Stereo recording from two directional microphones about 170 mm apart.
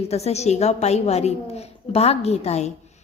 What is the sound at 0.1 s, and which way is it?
A woman's voice, 40° left (ahead or behind).